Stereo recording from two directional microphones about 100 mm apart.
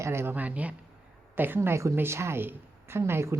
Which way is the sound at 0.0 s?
25° right (ahead or behind).